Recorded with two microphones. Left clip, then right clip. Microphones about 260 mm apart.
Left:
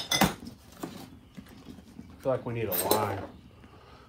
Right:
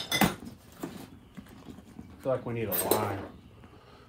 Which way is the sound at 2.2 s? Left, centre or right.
Left.